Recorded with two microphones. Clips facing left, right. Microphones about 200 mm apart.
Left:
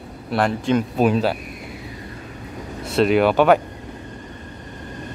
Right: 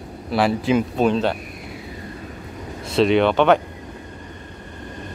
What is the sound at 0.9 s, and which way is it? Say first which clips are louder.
Speech: left 1 dB; 5° left (ahead or behind).